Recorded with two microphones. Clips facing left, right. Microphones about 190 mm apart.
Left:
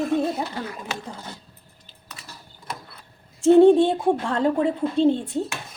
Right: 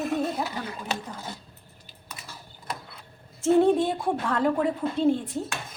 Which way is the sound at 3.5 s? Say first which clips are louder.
Left 7 dB; 30° left (ahead or behind).